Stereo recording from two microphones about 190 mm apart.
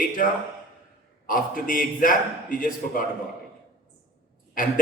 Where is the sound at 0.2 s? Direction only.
45° left (ahead or behind).